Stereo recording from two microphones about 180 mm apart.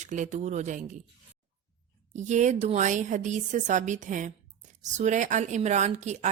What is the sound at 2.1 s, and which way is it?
A woman's voice, 40° right (ahead or behind).